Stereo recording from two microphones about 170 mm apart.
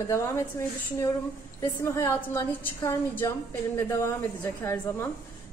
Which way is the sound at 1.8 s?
15° left (ahead or behind).